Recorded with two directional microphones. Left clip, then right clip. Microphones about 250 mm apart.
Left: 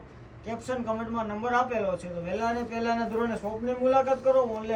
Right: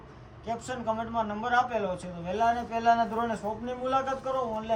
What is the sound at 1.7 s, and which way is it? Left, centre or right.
Speech, right.